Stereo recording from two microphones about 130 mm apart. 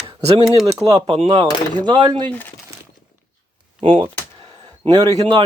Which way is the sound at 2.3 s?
15° left (ahead or behind).